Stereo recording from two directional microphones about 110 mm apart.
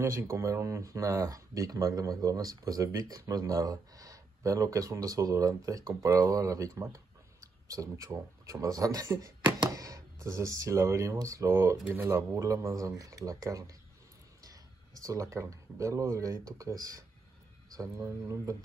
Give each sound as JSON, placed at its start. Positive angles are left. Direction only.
{"t": 0.0, "sound": "speech", "side_deg": -25}
{"t": 15.0, "sound": "speech", "side_deg": -30}